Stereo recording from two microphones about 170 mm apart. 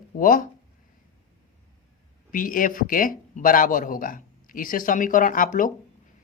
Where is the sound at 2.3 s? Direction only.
55° left (ahead or behind).